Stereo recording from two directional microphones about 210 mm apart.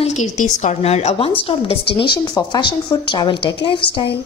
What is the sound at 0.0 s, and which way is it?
A woman's voice, 35° left (ahead or behind).